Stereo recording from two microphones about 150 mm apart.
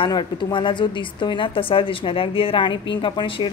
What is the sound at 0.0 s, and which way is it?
A woman's voice, 30° left (ahead or behind).